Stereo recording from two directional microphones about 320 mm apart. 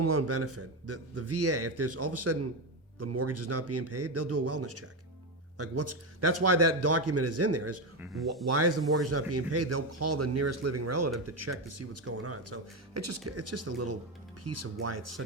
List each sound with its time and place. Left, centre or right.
0.0 s a man's voice: right
7.9 s speech: centre
8.4 s a man's voice: right